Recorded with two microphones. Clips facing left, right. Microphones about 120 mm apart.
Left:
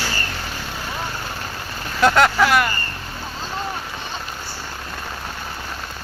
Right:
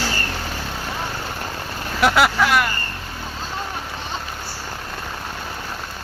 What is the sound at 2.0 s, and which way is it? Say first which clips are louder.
Speech: left 2 dB; 5° right (ahead or behind).